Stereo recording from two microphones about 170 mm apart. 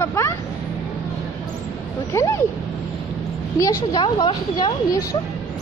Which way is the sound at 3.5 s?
25° left (ahead or behind).